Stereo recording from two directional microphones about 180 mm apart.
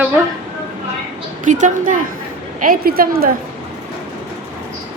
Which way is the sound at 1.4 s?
45° right (ahead or behind).